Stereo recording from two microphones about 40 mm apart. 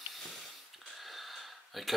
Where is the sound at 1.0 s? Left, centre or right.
Centre.